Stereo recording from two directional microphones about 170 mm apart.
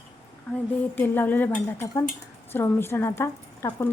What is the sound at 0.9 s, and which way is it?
A woman's voice, 10° left (ahead or behind).